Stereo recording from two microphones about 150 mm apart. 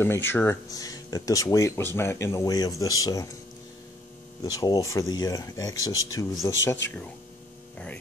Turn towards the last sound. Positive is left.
turn(degrees=20)  # may be behind; listen again after turning